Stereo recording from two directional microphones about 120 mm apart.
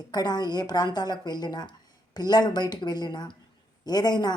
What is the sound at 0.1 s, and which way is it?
A woman's voice, 35° left (ahead or behind).